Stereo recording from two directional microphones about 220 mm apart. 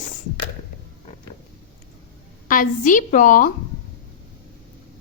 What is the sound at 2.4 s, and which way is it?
A woman's voice, 40° left (ahead or behind).